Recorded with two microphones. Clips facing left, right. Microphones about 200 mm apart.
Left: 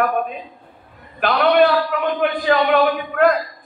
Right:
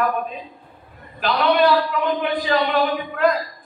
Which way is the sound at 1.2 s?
55° left (ahead or behind).